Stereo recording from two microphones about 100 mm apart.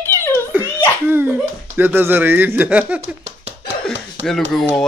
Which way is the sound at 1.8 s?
20° right (ahead or behind).